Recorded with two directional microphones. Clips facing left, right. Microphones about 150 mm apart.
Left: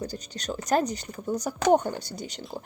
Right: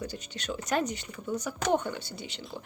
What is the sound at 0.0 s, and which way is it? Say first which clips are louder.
Speech: left 3 dB; 35° left (ahead or behind).